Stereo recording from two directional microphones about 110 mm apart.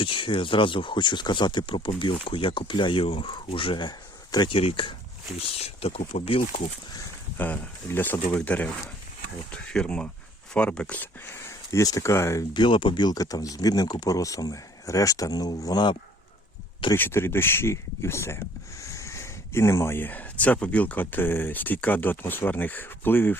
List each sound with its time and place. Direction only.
0.0 s speech: 50° left (ahead or behind)
4.5 s speech: 55° left (ahead or behind)
7.3 s speech: 15° left (ahead or behind)
12.5 s speech: 50° left (ahead or behind)
16.9 s speech: 20° left (ahead or behind)